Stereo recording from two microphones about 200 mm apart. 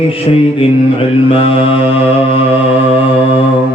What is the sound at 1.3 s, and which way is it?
Mantra, 30° left (ahead or behind).